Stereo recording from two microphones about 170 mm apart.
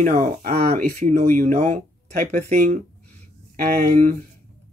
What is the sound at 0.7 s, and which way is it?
Speech, 45° right (ahead or behind).